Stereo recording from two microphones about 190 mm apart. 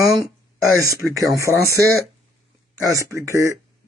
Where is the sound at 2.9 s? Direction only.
15° right (ahead or behind).